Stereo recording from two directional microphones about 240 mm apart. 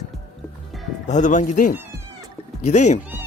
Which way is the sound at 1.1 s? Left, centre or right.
Left.